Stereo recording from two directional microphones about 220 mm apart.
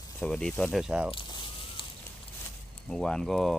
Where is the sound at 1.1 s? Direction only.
20° left (ahead or behind).